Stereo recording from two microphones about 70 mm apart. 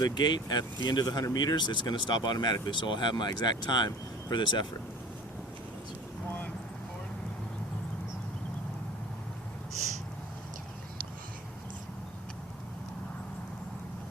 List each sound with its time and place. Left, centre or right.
0.0 s speech: left